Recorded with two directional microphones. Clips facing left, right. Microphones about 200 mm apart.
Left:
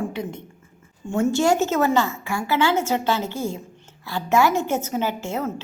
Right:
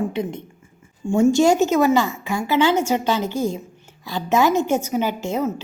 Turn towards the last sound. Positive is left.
turn(degrees=-15)  # may be behind; listen again after turning